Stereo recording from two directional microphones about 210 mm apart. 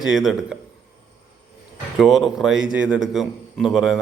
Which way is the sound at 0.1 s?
Centre (ahead or behind).